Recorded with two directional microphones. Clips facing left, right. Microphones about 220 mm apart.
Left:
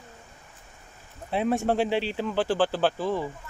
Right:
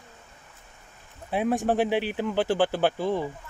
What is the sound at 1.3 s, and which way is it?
Speech, 15° right (ahead or behind).